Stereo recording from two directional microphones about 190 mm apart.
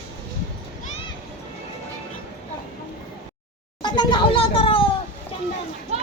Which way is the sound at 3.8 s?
25° left (ahead or behind).